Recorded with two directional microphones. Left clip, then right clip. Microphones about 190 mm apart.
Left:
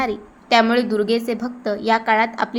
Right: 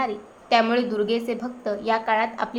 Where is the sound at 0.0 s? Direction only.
20° left (ahead or behind).